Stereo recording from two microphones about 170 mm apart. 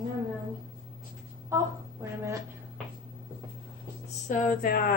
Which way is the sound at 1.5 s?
15° right (ahead or behind).